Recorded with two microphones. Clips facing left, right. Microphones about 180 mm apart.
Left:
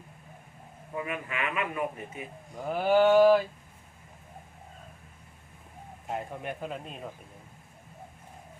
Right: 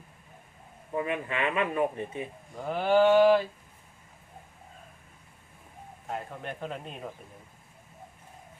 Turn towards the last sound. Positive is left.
turn(degrees=0)  # may be behind; listen again after turning